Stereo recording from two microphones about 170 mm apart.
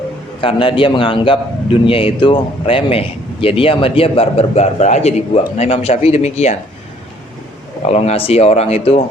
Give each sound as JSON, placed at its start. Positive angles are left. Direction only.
{"t": 0.4, "sound": "a man's voice", "side_deg": 30}
{"t": 7.9, "sound": "a man's voice", "side_deg": 40}